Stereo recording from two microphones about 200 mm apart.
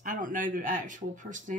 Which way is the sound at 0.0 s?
45° right (ahead or behind).